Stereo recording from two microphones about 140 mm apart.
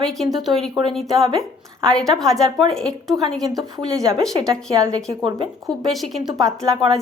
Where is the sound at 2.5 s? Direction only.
35° right (ahead or behind).